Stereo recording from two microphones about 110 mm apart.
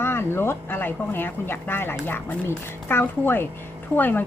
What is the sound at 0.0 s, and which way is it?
A woman's voice, 20° left (ahead or behind).